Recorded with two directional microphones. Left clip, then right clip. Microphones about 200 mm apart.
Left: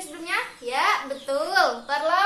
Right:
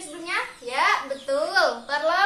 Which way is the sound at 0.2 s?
30° left (ahead or behind).